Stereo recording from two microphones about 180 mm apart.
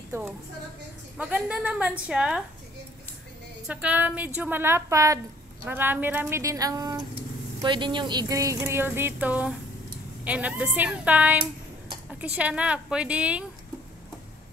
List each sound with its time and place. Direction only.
1.1 s a woman's voice: 5° right (ahead or behind)
3.6 s speech: 5° right (ahead or behind)